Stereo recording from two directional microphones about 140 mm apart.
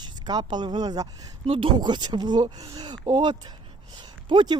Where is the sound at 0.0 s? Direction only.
30° right (ahead or behind).